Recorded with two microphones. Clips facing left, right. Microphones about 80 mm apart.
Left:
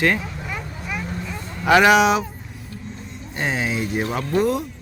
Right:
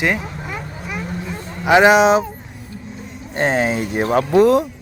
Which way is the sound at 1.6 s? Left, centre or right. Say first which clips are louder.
Right 3 dB; right.